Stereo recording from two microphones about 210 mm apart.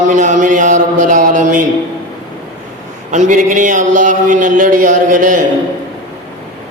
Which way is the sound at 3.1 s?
35° right (ahead or behind).